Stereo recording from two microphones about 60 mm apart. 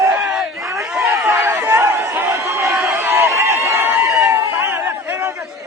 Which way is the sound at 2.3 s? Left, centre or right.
Right.